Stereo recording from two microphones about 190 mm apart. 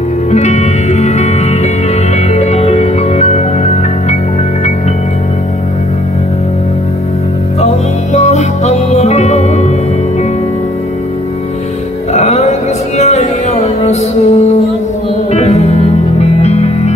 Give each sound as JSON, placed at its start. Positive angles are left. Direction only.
{"t": 0.3, "sound": "music", "side_deg": 35}
{"t": 7.6, "sound": "music", "side_deg": 35}
{"t": 12.1, "sound": "music", "side_deg": 35}